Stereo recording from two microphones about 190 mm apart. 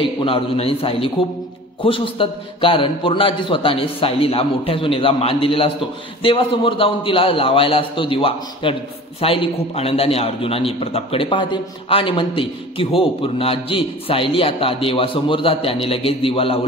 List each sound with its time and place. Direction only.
0.0 s a man's voice: 30° left (ahead or behind)